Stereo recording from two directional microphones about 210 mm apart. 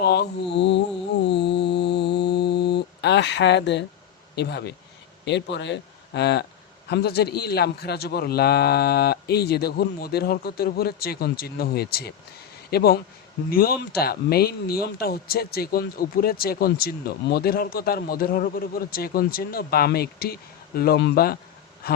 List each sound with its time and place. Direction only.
0.0 s music: 50° left (ahead or behind)
4.4 s a man's voice: 50° left (ahead or behind)
21.8 s a sound: 45° left (ahead or behind)